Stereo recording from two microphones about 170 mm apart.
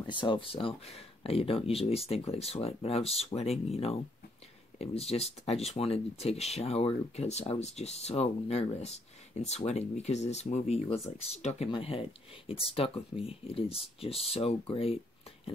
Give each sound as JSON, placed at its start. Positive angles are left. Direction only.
{"t": 0.0, "sound": "speech", "side_deg": 25}